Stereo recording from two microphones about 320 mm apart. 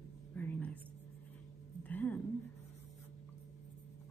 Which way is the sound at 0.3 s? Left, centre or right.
Centre.